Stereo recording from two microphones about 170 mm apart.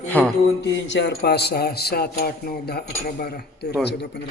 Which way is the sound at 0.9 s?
90° left.